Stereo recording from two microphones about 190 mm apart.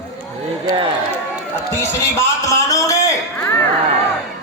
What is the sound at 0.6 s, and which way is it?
Speech, 25° right (ahead or behind).